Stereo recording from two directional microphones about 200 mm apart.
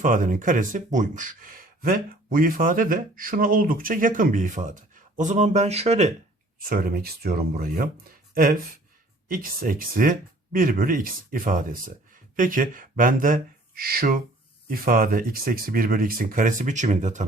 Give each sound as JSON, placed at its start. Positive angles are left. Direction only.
{"t": 0.0, "sound": "speech", "side_deg": -40}
{"t": 6.7, "sound": "speech", "side_deg": -45}
{"t": 9.3, "sound": "speech", "side_deg": -45}